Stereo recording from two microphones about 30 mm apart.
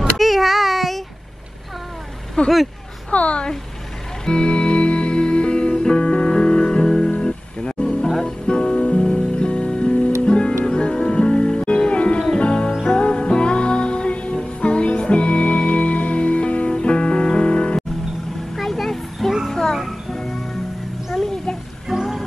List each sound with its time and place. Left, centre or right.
0.2 s a sound: centre
2.4 s a woman's voice: left
4.3 s music: left; by 8.4 s centre
8.5 s music: left
8.7 s music: left
9.0 s music: left
18.6 s vehicle: centre
19.2 s child singing: centre
19.5 s music: centre
21.9 s music: centre